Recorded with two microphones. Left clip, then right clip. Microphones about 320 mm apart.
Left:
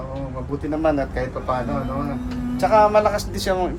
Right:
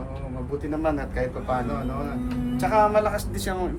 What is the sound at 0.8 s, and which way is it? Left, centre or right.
Speech, centre.